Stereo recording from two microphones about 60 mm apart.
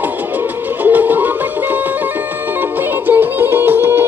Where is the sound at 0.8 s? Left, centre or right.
Right.